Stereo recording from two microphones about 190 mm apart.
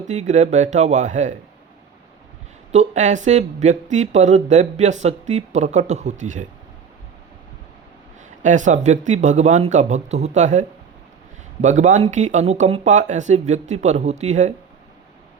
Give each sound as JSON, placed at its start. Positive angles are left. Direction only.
{"t": 0.0, "sound": "speech", "side_deg": -40}
{"t": 2.7, "sound": "speech", "side_deg": -40}
{"t": 8.4, "sound": "speech", "side_deg": -40}